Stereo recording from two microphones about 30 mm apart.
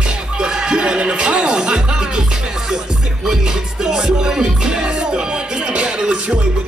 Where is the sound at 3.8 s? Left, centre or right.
Right.